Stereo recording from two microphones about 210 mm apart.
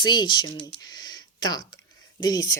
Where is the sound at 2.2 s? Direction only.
20° left (ahead or behind).